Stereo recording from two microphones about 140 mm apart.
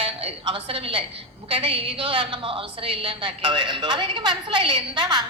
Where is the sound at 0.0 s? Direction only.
40° right (ahead or behind).